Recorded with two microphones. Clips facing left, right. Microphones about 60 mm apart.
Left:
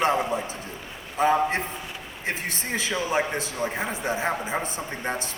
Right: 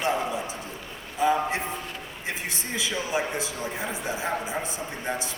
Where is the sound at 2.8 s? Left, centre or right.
Left.